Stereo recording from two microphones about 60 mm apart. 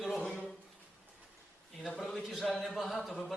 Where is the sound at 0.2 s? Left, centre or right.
Centre.